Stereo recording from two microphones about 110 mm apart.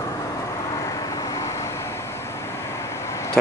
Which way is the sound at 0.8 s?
30° left (ahead or behind).